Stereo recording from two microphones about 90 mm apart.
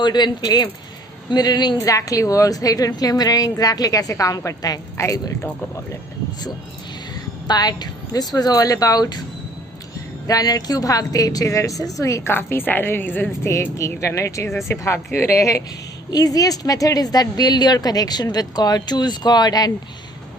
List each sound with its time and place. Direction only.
0.0 s speech: 55° left (ahead or behind)
1.8 s a woman's voice: 40° left (ahead or behind)
7.4 s speech: 50° left (ahead or behind)
10.2 s a woman's voice: 45° left (ahead or behind); by 13.5 s 20° left (ahead or behind)
13.7 s a woman's voice: 35° left (ahead or behind)